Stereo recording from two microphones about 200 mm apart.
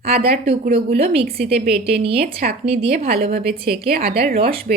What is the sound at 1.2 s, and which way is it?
A woman's voice, 50° right (ahead or behind).